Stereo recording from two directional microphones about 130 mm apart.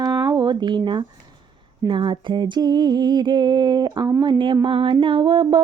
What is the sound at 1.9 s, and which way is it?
Mantra, 40° right (ahead or behind).